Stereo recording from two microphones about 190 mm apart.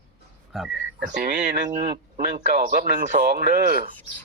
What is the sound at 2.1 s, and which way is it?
Speech, 40° right (ahead or behind).